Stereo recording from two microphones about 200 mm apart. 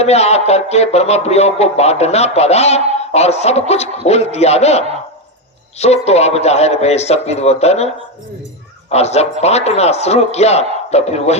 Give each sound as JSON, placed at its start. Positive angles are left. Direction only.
{"t": 0.0, "sound": "music", "side_deg": 30}
{"t": 8.9, "sound": "music", "side_deg": 30}